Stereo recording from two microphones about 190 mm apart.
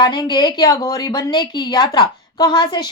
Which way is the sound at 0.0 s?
25° left (ahead or behind).